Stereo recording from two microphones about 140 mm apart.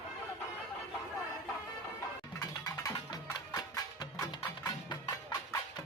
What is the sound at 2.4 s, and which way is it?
Music, 25° left (ahead or behind).